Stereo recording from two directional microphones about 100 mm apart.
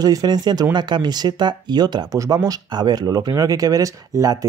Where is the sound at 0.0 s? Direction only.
40° right (ahead or behind).